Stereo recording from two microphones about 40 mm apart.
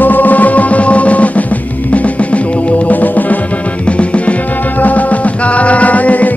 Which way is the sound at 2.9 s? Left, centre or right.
Left.